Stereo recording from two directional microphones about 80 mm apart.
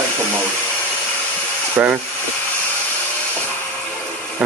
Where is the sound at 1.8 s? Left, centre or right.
Centre.